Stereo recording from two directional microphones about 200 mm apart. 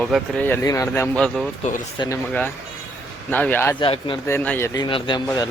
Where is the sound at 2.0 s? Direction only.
25° left (ahead or behind).